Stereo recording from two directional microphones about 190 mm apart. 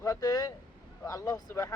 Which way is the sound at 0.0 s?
20° left (ahead or behind).